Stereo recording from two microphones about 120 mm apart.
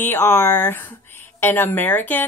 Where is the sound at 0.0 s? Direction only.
15° left (ahead or behind).